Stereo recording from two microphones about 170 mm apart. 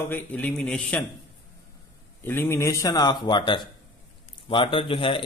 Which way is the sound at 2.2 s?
15° left (ahead or behind).